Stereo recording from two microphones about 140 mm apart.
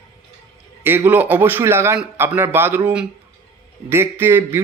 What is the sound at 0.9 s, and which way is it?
A man's voice, 15° right (ahead or behind).